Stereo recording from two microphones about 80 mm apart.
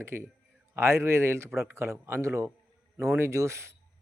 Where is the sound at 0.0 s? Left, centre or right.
Right.